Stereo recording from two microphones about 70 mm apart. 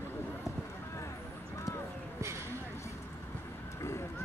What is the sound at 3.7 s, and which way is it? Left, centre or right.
Vehicle, left.